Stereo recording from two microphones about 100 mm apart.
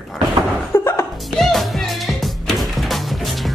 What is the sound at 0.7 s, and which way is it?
Music, 25° left (ahead or behind).